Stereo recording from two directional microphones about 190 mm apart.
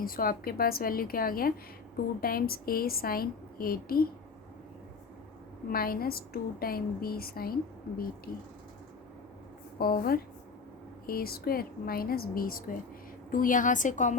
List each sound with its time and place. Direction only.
0.0 s a woman's voice: 50° left (ahead or behind)
5.6 s a woman's voice: 50° left (ahead or behind)
9.7 s a woman's voice: 50° left (ahead or behind)